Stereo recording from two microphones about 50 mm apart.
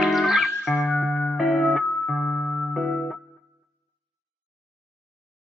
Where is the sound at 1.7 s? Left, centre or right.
Centre.